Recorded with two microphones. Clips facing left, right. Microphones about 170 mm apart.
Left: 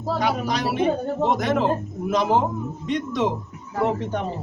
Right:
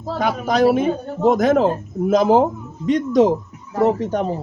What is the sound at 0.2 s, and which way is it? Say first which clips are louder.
A man's voice: right 9 dB; 50° right (ahead or behind).